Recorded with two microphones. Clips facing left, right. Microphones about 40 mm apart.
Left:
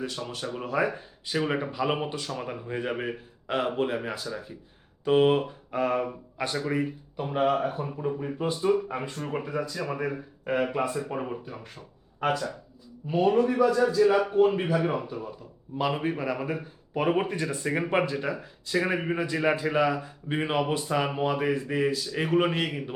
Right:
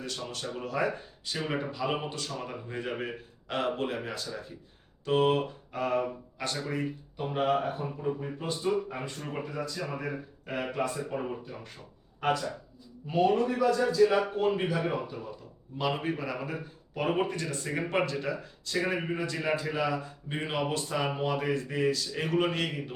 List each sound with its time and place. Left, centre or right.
0.0 s a man's voice: centre